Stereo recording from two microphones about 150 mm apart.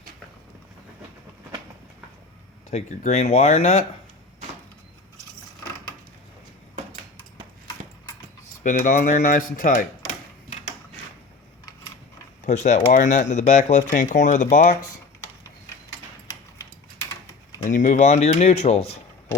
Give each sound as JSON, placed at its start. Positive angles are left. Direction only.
{"t": 2.6, "sound": "speech", "side_deg": 50}
{"t": 8.6, "sound": "speech", "side_deg": 60}
{"t": 12.5, "sound": "speech", "side_deg": 50}
{"t": 17.6, "sound": "speech", "side_deg": 60}